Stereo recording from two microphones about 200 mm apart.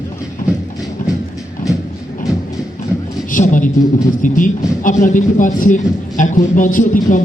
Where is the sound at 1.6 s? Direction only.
40° left (ahead or behind).